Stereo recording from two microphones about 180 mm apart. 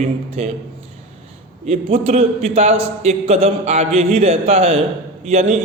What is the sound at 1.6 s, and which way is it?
A man's voice, 35° right (ahead or behind).